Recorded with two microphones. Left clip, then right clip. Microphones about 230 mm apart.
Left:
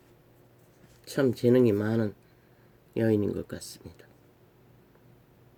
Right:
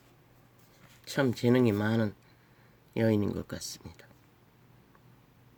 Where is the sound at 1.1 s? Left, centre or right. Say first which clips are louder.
Left 3 dB; right.